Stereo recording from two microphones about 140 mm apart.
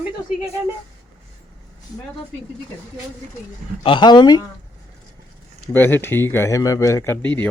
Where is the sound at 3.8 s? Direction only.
35° left (ahead or behind).